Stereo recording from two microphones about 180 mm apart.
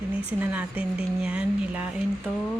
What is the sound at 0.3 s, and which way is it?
Speech, 10° right (ahead or behind).